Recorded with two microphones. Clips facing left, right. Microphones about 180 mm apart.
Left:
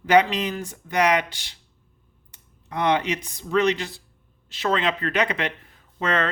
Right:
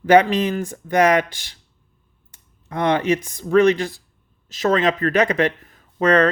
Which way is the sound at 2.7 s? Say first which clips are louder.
Right 4 dB; 50° right (ahead or behind).